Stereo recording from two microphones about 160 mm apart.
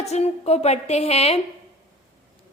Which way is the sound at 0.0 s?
40° left (ahead or behind).